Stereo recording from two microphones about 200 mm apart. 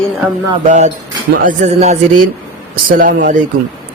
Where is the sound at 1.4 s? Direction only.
35° right (ahead or behind).